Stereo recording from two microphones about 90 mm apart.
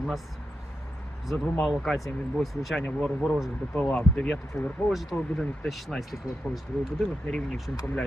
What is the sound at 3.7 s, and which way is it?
Speech, 15° left (ahead or behind).